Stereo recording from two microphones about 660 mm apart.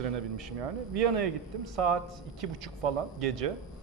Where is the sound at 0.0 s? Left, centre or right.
Right.